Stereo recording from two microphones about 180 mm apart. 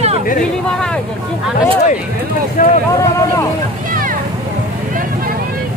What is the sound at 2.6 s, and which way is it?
Boat, 50° left (ahead or behind).